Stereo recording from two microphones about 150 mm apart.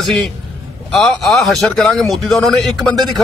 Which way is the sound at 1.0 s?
Centre (ahead or behind).